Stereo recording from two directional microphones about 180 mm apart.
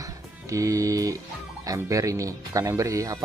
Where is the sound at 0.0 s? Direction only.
20° right (ahead or behind).